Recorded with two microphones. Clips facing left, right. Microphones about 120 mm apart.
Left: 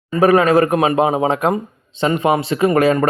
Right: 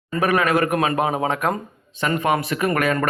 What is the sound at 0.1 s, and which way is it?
Speech, 35° left (ahead or behind).